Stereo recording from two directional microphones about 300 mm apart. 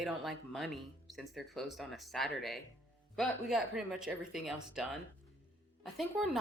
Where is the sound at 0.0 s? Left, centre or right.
Centre.